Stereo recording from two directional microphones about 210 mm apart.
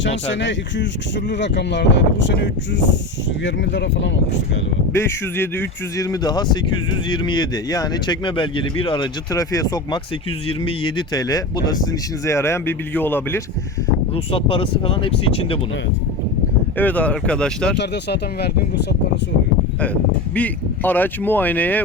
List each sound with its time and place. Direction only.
0.3 s speech: 60° left (ahead or behind)
4.9 s speech: 10° left (ahead or behind)
14.3 s speech: 25° left (ahead or behind)
16.7 s speech: 5° left (ahead or behind)
17.7 s speech: 50° left (ahead or behind)
19.8 s speech: 5° left (ahead or behind)